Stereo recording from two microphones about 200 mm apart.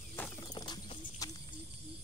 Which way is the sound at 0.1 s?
10° left (ahead or behind).